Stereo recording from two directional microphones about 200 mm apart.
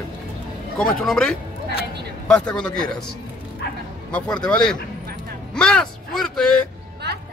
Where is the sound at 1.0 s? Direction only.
5° left (ahead or behind).